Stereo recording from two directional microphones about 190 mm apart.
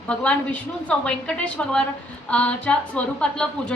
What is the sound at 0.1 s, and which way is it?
A woman's voice, 5° left (ahead or behind).